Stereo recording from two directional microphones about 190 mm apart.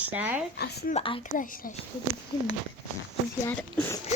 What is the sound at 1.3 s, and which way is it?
Speech, 45° left (ahead or behind).